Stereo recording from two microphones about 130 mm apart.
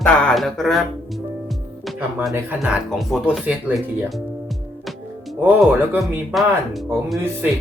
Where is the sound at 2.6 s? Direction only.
Centre (ahead or behind).